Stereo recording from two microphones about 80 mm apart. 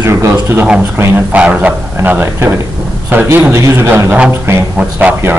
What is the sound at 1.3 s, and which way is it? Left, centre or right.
A man's voice, centre.